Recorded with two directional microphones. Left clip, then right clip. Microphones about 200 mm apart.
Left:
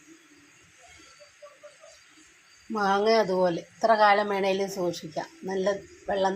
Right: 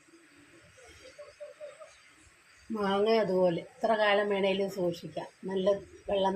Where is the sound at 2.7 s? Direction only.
20° left (ahead or behind).